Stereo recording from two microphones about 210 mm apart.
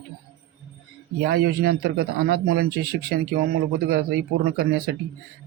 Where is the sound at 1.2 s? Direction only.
50° right (ahead or behind).